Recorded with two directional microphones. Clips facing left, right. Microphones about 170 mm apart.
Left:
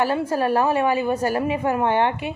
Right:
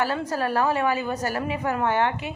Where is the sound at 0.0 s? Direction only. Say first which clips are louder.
Left 4 dB; 15° left (ahead or behind).